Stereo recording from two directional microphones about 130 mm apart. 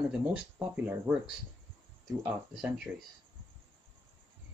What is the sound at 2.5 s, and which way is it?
Speech, 5° right (ahead or behind).